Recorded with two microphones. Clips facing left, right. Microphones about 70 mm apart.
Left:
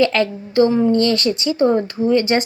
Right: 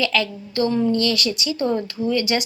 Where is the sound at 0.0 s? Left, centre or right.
Left.